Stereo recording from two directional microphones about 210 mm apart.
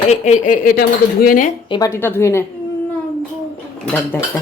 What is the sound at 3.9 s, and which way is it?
Speech, 5° left (ahead or behind).